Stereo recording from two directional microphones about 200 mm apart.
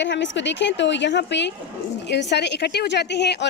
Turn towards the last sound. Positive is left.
turn(degrees=60)  # may be behind; listen again after turning